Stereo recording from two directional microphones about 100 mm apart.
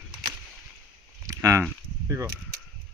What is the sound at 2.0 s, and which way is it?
Speech, 30° right (ahead or behind).